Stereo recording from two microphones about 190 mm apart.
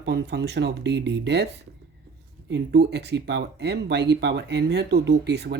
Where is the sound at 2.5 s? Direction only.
60° right (ahead or behind).